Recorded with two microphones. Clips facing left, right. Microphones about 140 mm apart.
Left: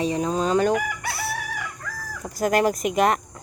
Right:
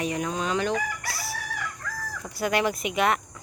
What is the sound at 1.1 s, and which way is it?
Crowing, 60° left (ahead or behind).